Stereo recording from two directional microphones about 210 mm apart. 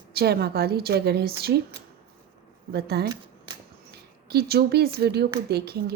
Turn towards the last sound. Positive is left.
turn(degrees=-50)  # may be behind; listen again after turning